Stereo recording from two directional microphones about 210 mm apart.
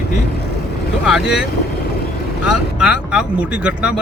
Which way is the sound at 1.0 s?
5° right (ahead or behind).